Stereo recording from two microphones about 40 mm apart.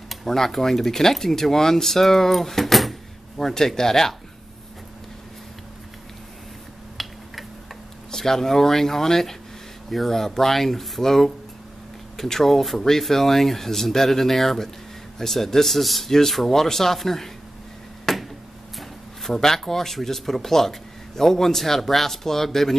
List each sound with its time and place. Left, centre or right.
0.1 s speech: centre
7.0 s finger snapping: centre
8.1 s speech: centre
18.1 s a sound: centre
18.8 s speech: centre